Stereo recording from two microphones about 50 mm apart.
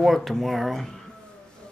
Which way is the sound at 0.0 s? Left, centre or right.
Centre.